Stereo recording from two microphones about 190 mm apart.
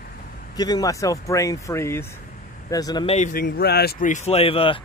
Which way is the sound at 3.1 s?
40° left (ahead or behind).